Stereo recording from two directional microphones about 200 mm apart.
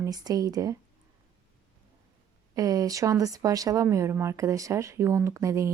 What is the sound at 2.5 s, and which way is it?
Speech, 15° right (ahead or behind).